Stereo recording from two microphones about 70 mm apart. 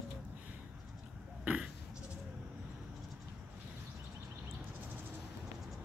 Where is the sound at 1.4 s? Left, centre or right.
Centre.